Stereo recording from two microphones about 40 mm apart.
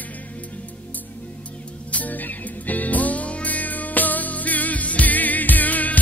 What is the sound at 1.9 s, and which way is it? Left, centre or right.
Music, left.